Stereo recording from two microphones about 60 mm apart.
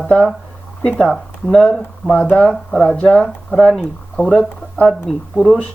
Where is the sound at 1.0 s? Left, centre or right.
Centre.